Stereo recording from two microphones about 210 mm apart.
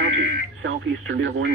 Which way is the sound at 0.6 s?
65° right (ahead or behind).